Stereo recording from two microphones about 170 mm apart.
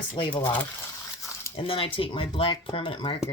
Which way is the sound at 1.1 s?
15° left (ahead or behind).